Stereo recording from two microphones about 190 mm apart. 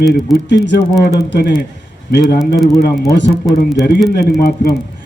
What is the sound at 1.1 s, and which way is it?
Speech, 60° left (ahead or behind).